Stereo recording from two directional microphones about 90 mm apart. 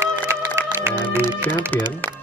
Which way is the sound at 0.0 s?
30° right (ahead or behind).